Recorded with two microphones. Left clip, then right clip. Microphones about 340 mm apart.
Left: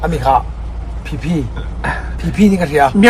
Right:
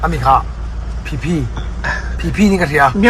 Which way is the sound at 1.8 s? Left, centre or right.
Left.